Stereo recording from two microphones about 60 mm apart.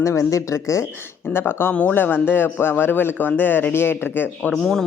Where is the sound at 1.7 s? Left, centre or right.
Left.